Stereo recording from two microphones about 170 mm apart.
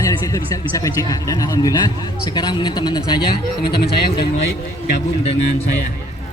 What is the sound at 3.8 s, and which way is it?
Speech, 70° left (ahead or behind).